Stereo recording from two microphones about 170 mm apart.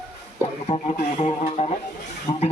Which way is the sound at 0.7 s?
40° left (ahead or behind).